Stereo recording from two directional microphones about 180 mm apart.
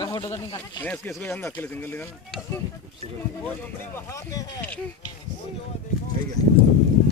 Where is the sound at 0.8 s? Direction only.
10° left (ahead or behind).